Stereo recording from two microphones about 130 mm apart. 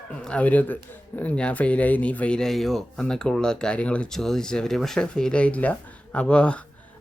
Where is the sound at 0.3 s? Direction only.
10° left (ahead or behind).